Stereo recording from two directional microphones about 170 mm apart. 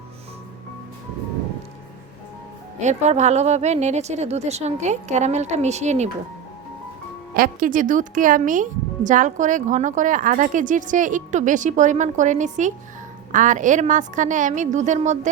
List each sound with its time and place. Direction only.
2.8 s a woman's voice: 40° right (ahead or behind)
7.3 s a woman's voice: 55° right (ahead or behind)